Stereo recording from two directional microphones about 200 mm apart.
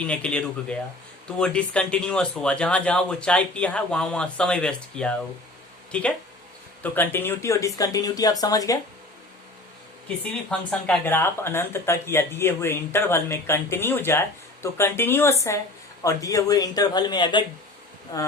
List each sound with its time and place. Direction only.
0.0 s speech: 5° left (ahead or behind)
10.7 s speech: 5° left (ahead or behind)